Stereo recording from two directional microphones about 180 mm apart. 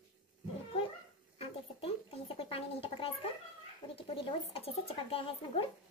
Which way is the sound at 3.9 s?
30° left (ahead or behind).